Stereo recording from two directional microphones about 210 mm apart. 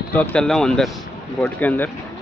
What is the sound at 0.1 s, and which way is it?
Speech, 5° left (ahead or behind).